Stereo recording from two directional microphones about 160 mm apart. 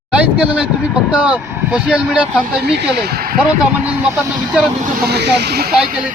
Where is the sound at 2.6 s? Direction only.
90° right; by 3.3 s 75° right (ahead or behind).